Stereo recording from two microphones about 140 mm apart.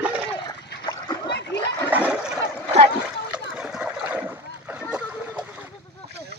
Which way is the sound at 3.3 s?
5° right (ahead or behind).